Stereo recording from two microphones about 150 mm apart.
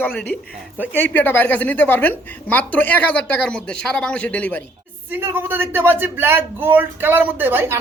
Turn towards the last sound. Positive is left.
turn(degrees=-15)  # may be behind; listen again after turning